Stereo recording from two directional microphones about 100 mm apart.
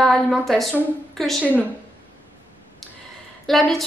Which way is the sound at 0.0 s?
5° left (ahead or behind).